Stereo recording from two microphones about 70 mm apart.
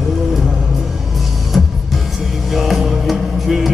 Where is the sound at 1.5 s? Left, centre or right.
Centre.